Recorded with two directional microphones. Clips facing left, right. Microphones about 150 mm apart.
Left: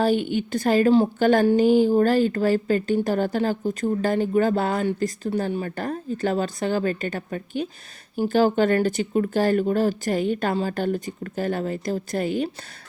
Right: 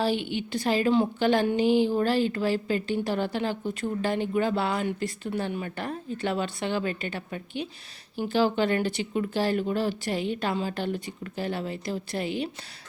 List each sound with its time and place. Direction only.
0.0 s a woman's voice: 45° left (ahead or behind)